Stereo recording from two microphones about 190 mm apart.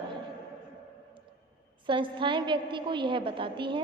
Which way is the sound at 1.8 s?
25° right (ahead or behind).